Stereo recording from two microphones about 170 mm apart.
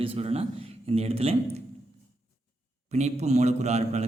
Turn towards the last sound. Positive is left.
turn(degrees=-40)  # may be behind; listen again after turning